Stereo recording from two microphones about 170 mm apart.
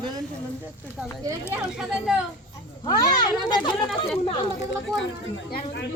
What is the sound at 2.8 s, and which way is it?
Speech, 25° left (ahead or behind).